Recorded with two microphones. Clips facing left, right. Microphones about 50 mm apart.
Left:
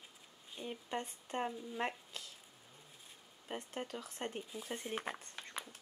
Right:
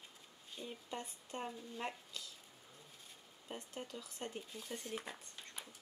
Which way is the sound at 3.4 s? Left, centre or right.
Left.